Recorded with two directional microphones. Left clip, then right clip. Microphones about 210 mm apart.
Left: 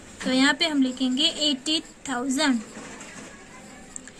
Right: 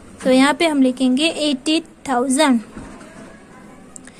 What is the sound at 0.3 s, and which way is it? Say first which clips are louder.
A woman's voice: right 7 dB; 30° right (ahead or behind).